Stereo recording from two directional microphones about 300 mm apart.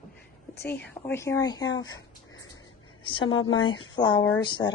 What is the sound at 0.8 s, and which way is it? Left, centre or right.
Speech, left.